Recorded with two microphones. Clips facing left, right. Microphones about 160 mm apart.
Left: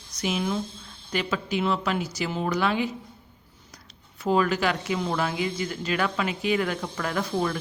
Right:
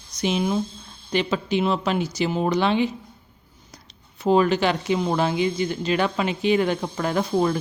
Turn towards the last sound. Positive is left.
turn(degrees=-25)  # may be behind; listen again after turning